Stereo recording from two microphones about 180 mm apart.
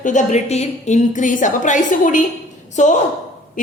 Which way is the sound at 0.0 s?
45° left (ahead or behind).